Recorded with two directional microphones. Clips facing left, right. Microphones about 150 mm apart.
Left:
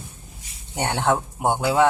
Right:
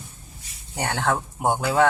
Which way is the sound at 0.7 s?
25° left (ahead or behind).